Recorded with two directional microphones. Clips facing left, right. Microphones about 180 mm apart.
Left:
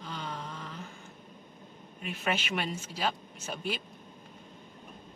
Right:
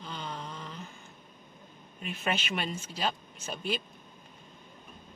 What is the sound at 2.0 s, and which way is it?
Speech, 10° left (ahead or behind).